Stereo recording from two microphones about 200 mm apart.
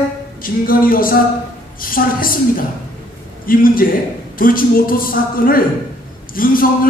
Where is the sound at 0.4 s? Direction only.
45° left (ahead or behind).